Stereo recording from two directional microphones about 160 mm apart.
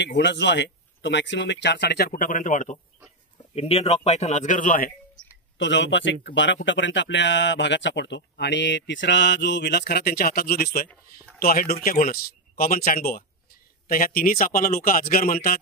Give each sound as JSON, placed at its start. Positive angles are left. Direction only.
{"t": 0.0, "sound": "speech", "side_deg": 90}
{"t": 3.5, "sound": "a man's voice", "side_deg": 40}
{"t": 5.7, "sound": "speech", "side_deg": 90}
{"t": 7.3, "sound": "speech", "side_deg": 90}
{"t": 10.9, "sound": "speech", "side_deg": 10}
{"t": 11.4, "sound": "speech", "side_deg": 65}